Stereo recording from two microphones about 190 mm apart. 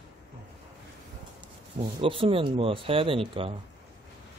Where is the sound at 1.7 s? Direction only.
30° right (ahead or behind).